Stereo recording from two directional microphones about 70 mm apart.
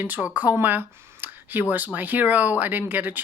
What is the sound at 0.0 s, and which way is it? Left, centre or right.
Speech, right.